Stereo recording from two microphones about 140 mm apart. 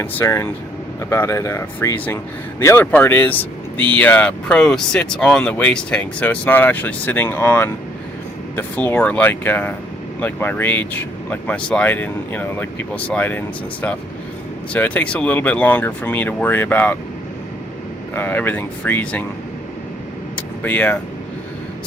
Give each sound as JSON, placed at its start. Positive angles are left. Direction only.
{"t": 0.0, "sound": "speech", "side_deg": 15}
{"t": 14.7, "sound": "speech", "side_deg": 10}
{"t": 18.1, "sound": "speech", "side_deg": 15}
{"t": 20.3, "sound": "vehicle", "side_deg": 10}